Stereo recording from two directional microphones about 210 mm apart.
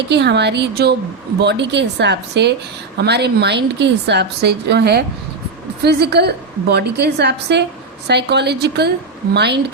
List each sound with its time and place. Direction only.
0.1 s a woman's voice: 55° right (ahead or behind)